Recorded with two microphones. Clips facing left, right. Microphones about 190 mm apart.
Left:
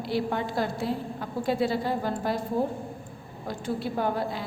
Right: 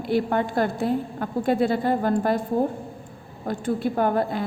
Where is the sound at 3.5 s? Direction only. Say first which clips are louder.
Right 6 dB; 50° right (ahead or behind).